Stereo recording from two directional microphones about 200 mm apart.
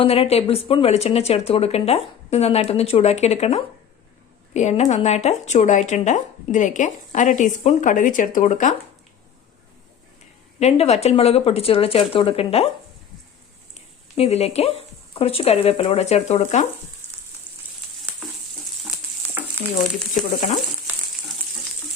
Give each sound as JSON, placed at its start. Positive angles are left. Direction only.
{"t": 0.0, "sound": "speech", "side_deg": 30}
{"t": 10.6, "sound": "speech", "side_deg": 30}
{"t": 13.7, "sound": "speech", "side_deg": 30}
{"t": 17.0, "sound": "frying", "side_deg": 10}
{"t": 19.3, "sound": "frying", "side_deg": -10}
{"t": 20.2, "sound": "frying", "side_deg": 0}